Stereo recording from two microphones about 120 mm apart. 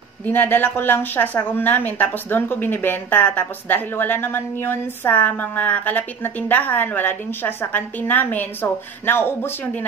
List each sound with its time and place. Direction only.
0.3 s a woman's voice: 15° left (ahead or behind)